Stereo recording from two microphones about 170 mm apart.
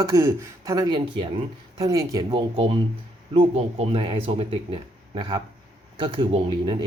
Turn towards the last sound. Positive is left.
turn(degrees=-30)  # may be behind; listen again after turning